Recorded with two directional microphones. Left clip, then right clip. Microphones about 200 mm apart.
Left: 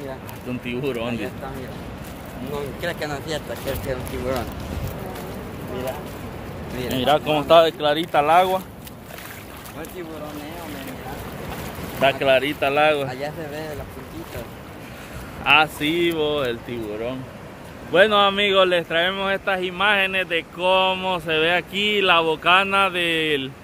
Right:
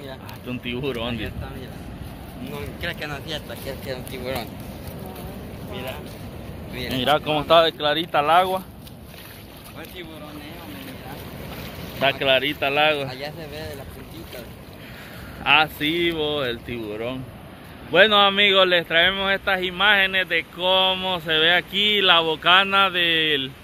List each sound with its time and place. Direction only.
0.5 s speech: centre (ahead or behind)
2.5 s speech: 20° left (ahead or behind)
7.0 s speech: 5° left (ahead or behind)
12.0 s speech: centre (ahead or behind)
13.1 s speech: 35° left (ahead or behind)
15.4 s speech: centre (ahead or behind)